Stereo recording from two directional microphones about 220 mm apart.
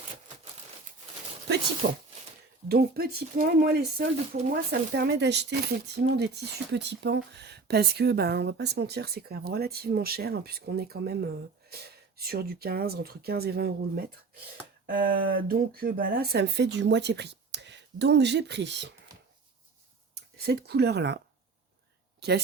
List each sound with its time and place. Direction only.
1.8 s speech: 55° right (ahead or behind)
2.6 s speech: 45° right (ahead or behind)
20.3 s speech: 45° right (ahead or behind)